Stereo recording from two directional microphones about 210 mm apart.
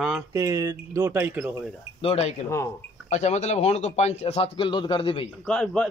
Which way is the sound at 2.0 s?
30° left (ahead or behind).